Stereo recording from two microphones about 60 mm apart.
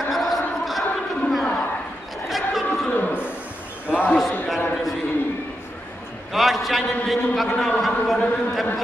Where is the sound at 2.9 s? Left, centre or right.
Left.